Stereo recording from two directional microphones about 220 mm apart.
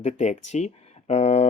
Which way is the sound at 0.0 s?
30° left (ahead or behind).